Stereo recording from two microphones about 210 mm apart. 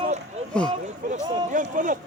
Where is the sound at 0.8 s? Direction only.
35° right (ahead or behind).